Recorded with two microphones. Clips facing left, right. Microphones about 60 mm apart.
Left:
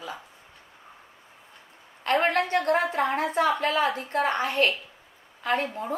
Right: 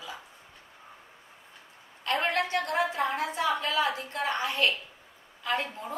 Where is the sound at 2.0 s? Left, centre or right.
Left.